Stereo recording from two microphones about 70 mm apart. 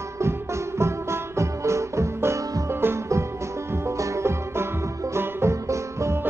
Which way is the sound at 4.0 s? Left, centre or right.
Right.